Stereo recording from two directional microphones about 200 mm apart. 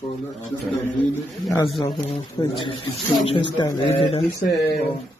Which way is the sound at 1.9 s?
25° left (ahead or behind).